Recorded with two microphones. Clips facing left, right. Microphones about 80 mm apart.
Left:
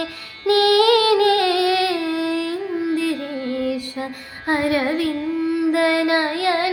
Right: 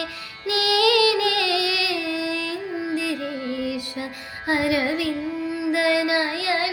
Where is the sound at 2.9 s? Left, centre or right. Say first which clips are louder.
Left 4 dB; left.